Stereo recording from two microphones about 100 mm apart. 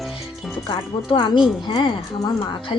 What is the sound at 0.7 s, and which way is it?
Speech, 45° left (ahead or behind).